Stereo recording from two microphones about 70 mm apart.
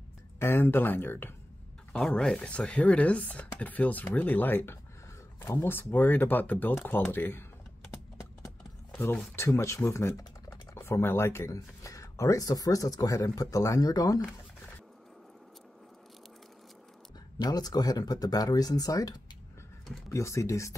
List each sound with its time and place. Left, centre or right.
0.4 s speech: left
1.9 s speech: centre
2.3 s speech: centre
9.3 s speech: left
11.5 s speech: left
17.4 s speech: left
20.1 s speech: left